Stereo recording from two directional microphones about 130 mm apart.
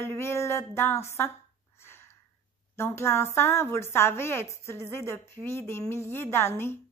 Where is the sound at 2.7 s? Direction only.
20° left (ahead or behind).